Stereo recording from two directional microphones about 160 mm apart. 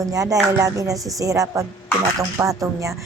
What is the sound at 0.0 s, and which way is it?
A woman's voice, 20° right (ahead or behind).